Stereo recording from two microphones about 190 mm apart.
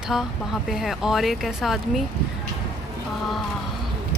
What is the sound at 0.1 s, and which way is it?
Speech, centre (ahead or behind).